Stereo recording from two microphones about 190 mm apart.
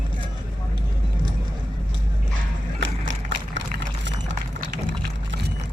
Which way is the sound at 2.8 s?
75° right (ahead or behind).